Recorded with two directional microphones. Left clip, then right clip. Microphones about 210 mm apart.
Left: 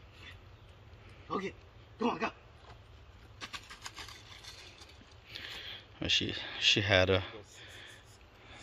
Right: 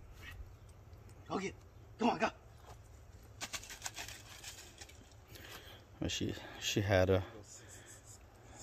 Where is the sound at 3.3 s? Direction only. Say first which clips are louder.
Even; 15° right (ahead or behind).